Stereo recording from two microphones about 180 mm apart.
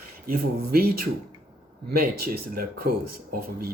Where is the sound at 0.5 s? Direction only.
55° right (ahead or behind).